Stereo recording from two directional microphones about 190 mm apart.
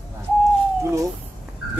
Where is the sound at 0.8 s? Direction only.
15° right (ahead or behind).